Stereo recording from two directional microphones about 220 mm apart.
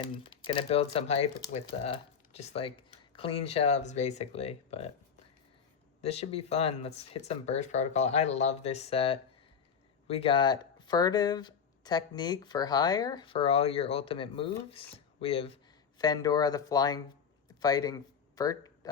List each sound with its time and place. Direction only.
0.0 s speech: 25° left (ahead or behind)
6.0 s speech: 30° left (ahead or behind)